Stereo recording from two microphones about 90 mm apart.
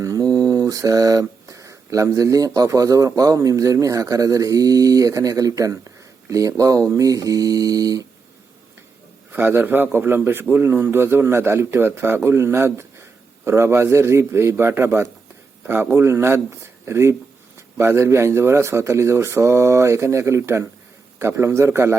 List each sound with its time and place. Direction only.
0.0 s mantra: 40° right (ahead or behind)
6.3 s a man's voice: 40° right (ahead or behind)
9.3 s a man's voice: 25° right (ahead or behind)